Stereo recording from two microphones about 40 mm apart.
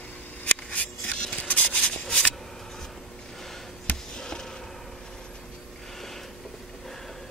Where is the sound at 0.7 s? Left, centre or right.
Left; by 2.3 s centre.